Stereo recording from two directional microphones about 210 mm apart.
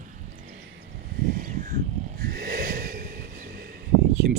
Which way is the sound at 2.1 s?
45° right (ahead or behind).